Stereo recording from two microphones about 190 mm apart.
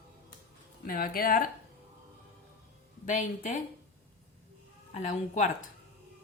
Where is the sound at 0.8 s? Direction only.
50° left (ahead or behind).